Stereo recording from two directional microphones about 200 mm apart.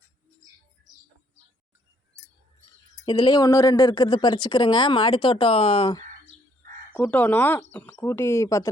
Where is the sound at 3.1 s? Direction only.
20° left (ahead or behind).